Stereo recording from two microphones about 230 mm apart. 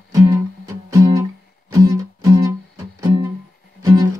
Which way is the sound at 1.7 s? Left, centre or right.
Centre.